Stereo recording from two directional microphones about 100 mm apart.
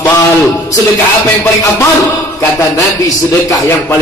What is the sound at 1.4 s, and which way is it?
A man's voice, 25° left (ahead or behind).